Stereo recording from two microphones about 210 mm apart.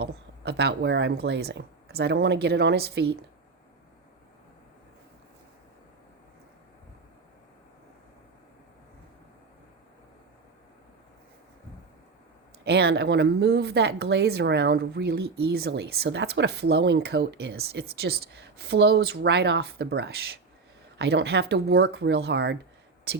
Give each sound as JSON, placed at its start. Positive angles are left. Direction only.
{"t": 0.0, "sound": "speech", "side_deg": -50}
{"t": 12.6, "sound": "speech", "side_deg": -50}